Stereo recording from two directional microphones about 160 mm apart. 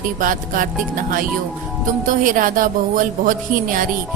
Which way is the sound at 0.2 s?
55° right (ahead or behind).